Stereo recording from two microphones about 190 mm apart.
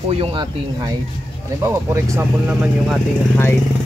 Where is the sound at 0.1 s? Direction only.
30° right (ahead or behind).